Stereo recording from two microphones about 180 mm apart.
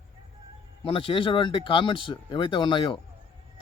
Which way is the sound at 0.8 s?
30° left (ahead or behind).